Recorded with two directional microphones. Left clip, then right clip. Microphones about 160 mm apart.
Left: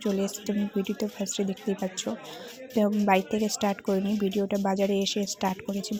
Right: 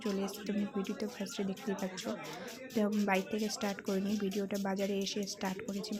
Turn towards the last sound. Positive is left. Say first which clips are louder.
# left 9 dB
turn(degrees=30)  # may be behind; listen again after turning